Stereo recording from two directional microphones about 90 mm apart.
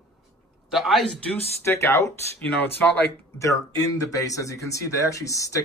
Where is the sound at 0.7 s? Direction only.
Centre (ahead or behind).